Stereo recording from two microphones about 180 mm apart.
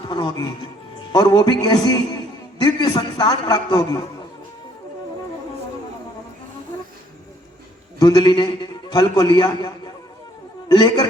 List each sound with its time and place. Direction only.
0.1 s a man's voice: 25° left (ahead or behind)
7.9 s a man's voice: 25° left (ahead or behind)